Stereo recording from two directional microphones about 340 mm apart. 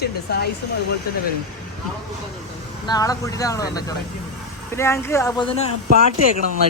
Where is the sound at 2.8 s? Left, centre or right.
Centre.